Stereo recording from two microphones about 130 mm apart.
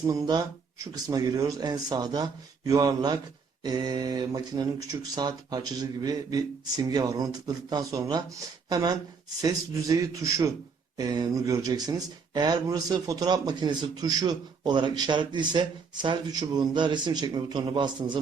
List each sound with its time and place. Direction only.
0.1 s speech: 30° right (ahead or behind)